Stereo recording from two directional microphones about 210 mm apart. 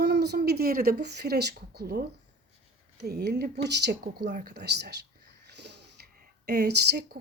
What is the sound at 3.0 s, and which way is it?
A woman's voice, 50° right (ahead or behind).